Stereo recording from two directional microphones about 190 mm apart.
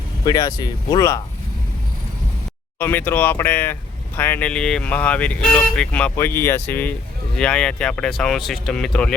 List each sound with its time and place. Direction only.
0.3 s speech: 20° left (ahead or behind)
2.7 s speech: 10° left (ahead or behind)